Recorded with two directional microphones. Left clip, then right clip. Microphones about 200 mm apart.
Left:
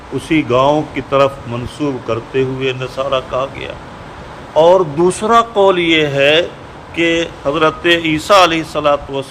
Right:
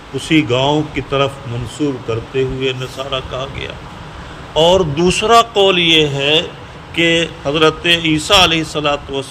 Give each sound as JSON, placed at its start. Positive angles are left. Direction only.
{"t": 0.2, "sound": "speech", "side_deg": -5}
{"t": 6.9, "sound": "speech", "side_deg": -10}